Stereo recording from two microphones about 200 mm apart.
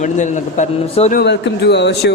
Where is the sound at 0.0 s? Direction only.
40° left (ahead or behind).